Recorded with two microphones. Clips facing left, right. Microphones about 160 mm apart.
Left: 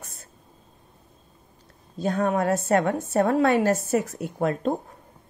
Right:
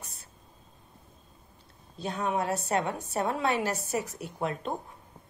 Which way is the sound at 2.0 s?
45° left (ahead or behind).